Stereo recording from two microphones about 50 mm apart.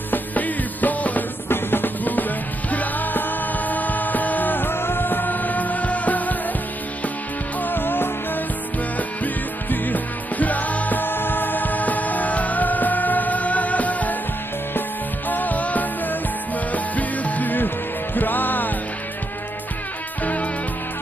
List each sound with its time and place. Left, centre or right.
0.1 s music: left
1.5 s music: left
7.6 s music: left
15.2 s music: left